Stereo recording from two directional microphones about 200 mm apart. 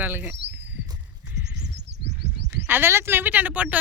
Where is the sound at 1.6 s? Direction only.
60° right (ahead or behind).